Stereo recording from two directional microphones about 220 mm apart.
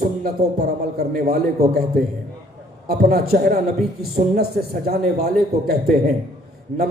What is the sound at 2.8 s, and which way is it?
A man's voice, 45° right (ahead or behind).